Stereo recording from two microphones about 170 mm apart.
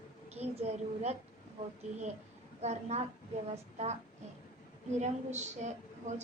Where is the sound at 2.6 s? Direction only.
40° right (ahead or behind).